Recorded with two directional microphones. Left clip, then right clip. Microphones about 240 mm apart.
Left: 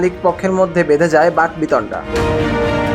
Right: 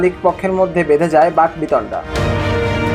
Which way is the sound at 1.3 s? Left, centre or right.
Left.